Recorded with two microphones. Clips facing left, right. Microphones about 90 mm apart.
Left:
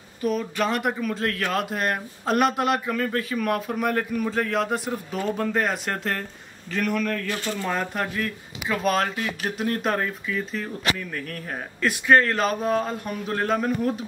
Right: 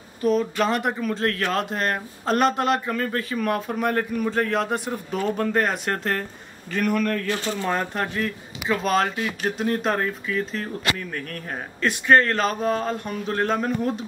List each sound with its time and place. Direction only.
0.2 s speech: 5° left (ahead or behind)
7.2 s speech: 20° right (ahead or behind)
7.6 s speech: centre (ahead or behind)